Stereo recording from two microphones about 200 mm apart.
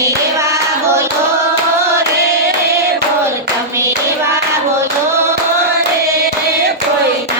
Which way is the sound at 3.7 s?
15° right (ahead or behind).